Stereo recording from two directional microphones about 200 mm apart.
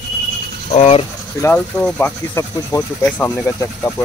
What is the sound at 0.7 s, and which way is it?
Speech, 30° left (ahead or behind).